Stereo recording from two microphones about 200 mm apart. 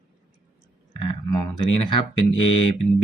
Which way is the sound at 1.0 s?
20° left (ahead or behind).